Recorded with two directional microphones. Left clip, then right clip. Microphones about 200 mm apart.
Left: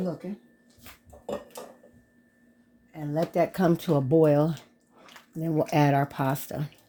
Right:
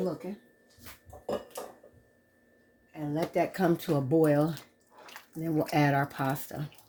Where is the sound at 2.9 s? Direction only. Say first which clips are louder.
Left 3 dB; 40° left (ahead or behind).